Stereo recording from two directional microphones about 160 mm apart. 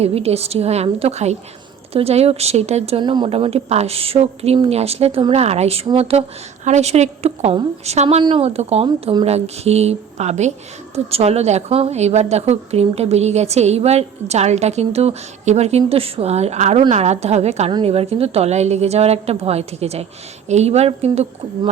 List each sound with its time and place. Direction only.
0.0 s speech: 40° right (ahead or behind)
3.0 s a woman's voice: 30° right (ahead or behind)